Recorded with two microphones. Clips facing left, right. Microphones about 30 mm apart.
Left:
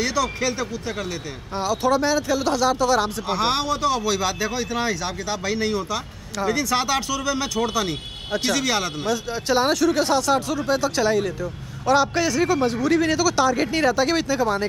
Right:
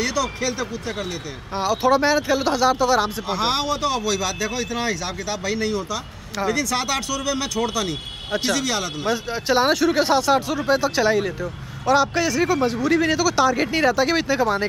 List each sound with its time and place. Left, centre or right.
0.0 s speech: centre
1.6 s speech: centre
4.0 s speech: centre
9.0 s speech: centre
11.8 s speech: centre